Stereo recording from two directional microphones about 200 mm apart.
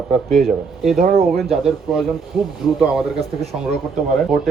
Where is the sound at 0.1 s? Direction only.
Centre (ahead or behind).